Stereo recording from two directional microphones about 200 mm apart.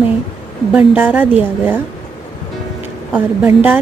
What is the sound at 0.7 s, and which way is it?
A woman's voice, 10° right (ahead or behind).